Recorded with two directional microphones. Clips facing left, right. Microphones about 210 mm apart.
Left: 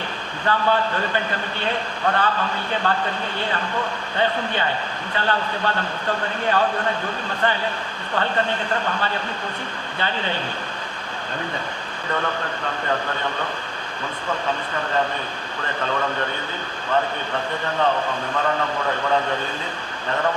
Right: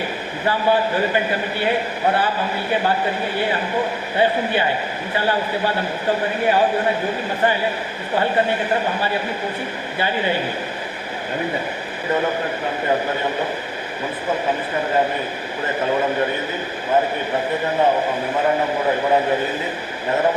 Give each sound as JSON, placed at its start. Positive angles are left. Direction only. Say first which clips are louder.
{"t": 0.4, "sound": "a man's voice", "louder": "right 2 dB", "side_deg": -10}
{"t": 12.0, "sound": "a man's voice", "louder": "right 5 dB", "side_deg": -20}
{"t": 15.6, "sound": "a man's voice", "louder": "right 5 dB", "side_deg": -20}
{"t": 17.9, "sound": "a man's voice", "louder": "right 4 dB", "side_deg": -25}
{"t": 20.1, "sound": "a man's voice", "louder": "right 4 dB", "side_deg": -25}